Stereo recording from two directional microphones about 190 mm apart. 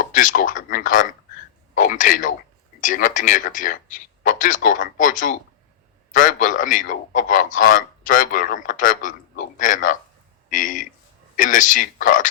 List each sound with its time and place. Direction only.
0.0 s a man's voice: 45° left (ahead or behind)